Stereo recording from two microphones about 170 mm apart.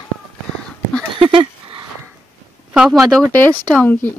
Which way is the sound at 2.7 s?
5° right (ahead or behind).